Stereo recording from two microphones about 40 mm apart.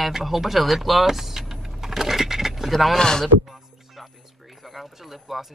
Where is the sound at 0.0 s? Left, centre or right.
Centre.